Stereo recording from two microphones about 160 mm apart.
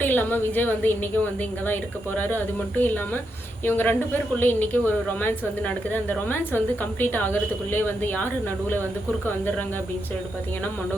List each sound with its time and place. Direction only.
0.0 s a woman's voice: 10° left (ahead or behind)